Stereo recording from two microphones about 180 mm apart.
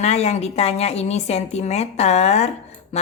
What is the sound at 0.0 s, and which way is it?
A woman's voice, 35° left (ahead or behind).